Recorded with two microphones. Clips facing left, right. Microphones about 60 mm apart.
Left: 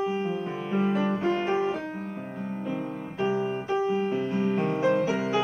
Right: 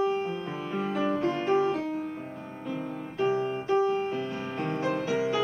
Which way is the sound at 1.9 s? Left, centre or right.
Left.